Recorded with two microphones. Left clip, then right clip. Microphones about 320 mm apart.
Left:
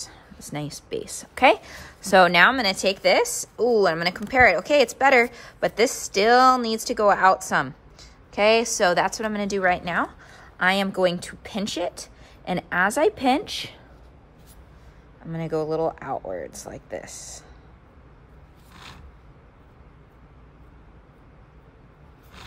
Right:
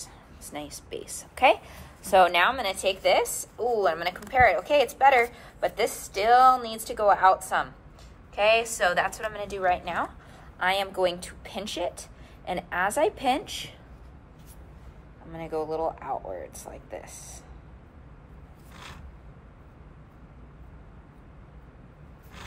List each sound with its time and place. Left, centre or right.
0.0 s a woman's voice: left
15.3 s a woman's voice: left